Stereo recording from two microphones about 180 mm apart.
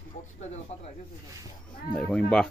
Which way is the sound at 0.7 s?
35° left (ahead or behind).